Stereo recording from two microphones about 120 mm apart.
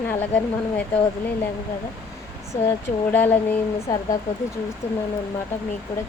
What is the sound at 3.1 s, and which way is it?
Speech, 15° left (ahead or behind).